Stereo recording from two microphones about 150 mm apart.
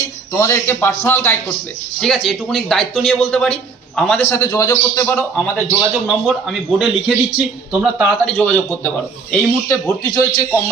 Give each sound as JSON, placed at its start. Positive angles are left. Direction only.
{"t": 0.3, "sound": "a man's voice", "side_deg": 20}
{"t": 2.0, "sound": "a man's voice", "side_deg": 0}
{"t": 4.2, "sound": "speech", "side_deg": 15}
{"t": 6.1, "sound": "speech", "side_deg": 0}